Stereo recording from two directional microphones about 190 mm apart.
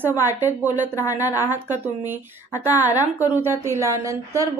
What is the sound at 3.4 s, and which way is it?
A woman's voice, 15° right (ahead or behind).